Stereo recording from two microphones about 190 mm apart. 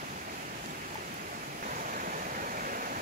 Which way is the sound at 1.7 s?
45° right (ahead or behind).